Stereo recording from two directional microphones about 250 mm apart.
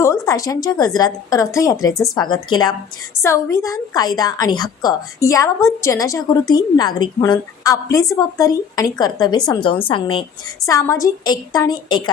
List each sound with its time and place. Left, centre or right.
0.0 s a woman's voice: centre